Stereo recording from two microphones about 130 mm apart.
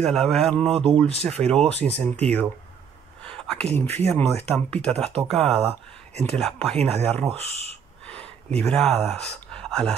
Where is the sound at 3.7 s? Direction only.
15° left (ahead or behind).